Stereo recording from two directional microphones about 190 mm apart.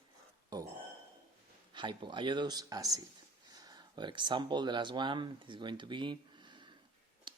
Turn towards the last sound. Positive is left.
turn(degrees=-25)  # may be behind; listen again after turning